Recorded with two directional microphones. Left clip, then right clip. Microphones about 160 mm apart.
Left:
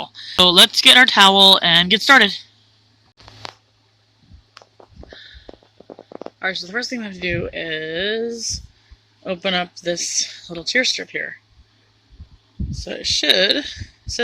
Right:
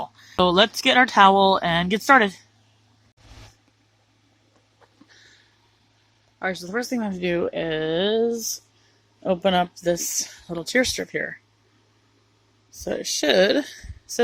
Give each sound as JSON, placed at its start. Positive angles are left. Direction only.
{"t": 0.0, "sound": "speech", "side_deg": 0}
{"t": 6.4, "sound": "speech", "side_deg": -15}
{"t": 6.7, "sound": "speech", "side_deg": -25}
{"t": 11.1, "sound": "speech", "side_deg": -20}
{"t": 12.7, "sound": "speech", "side_deg": -35}